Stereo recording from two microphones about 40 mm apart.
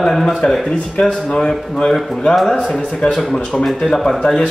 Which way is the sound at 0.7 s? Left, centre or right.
Left.